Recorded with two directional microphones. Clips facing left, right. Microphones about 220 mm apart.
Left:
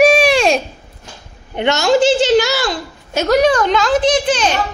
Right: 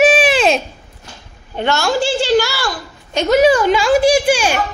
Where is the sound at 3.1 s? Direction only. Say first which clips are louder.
Right 1 dB; centre (ahead or behind).